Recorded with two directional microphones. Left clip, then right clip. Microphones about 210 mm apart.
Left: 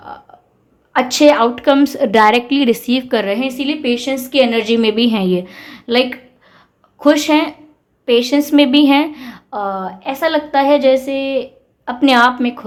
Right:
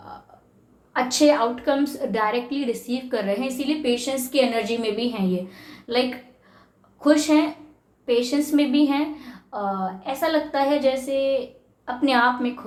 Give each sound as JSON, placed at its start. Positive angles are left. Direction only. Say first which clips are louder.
{"t": 0.9, "sound": "a woman's voice", "louder": "left 8 dB", "side_deg": 45}
{"t": 7.0, "sound": "a woman's voice", "louder": "left 6 dB", "side_deg": 45}